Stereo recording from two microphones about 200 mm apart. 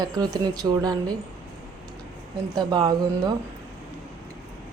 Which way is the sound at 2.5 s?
20° right (ahead or behind).